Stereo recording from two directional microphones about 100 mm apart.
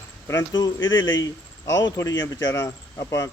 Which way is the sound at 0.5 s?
40° left (ahead or behind).